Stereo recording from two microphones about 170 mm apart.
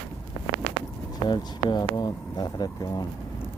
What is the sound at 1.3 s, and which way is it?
Speech, 25° left (ahead or behind).